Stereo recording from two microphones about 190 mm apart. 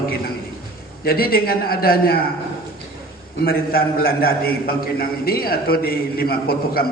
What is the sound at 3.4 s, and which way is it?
A man's voice, 55° left (ahead or behind).